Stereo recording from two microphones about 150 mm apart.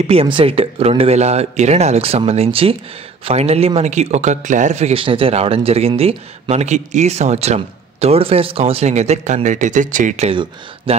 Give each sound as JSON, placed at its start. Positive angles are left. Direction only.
{"t": 0.0, "sound": "speech", "side_deg": -40}
{"t": 10.9, "sound": "speech", "side_deg": -40}